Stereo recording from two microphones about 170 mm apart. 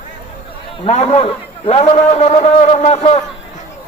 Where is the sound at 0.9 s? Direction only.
40° left (ahead or behind).